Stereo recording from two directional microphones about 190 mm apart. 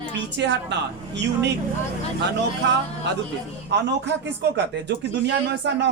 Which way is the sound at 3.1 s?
65° right (ahead or behind).